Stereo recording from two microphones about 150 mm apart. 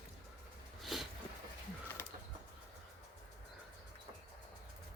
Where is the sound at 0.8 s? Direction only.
Centre (ahead or behind).